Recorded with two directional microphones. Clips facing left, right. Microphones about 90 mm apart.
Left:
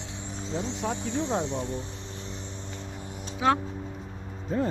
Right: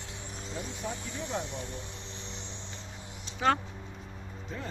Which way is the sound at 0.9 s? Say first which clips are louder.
Left 8 dB; 25° left (ahead or behind).